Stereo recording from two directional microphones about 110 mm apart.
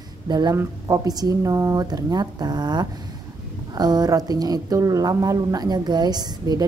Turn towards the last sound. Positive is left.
turn(degrees=-40)  # may be behind; listen again after turning